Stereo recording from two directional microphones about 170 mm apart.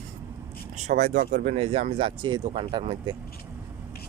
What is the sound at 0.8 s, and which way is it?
Speech, 40° right (ahead or behind).